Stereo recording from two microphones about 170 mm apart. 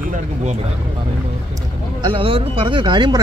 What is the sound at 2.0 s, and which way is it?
Speech, 30° right (ahead or behind).